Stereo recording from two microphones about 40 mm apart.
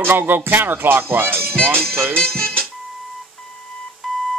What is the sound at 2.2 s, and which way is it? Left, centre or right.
Music, left.